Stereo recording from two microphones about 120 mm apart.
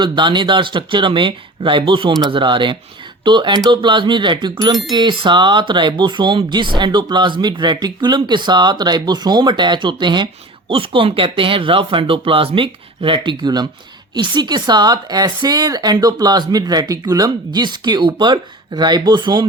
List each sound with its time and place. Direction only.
0.0 s speech: 40° right (ahead or behind)
10.7 s speech: 50° right (ahead or behind)